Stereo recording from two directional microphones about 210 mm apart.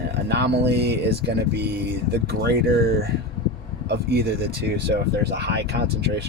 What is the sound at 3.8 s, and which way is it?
Speech, 50° right (ahead or behind).